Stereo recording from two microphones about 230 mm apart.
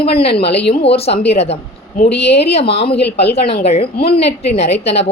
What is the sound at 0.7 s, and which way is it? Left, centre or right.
A woman's voice, left.